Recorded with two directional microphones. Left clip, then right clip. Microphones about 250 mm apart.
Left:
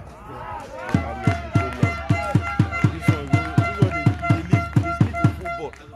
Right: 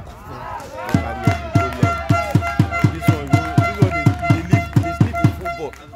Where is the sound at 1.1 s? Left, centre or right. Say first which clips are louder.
Right 4 dB; right.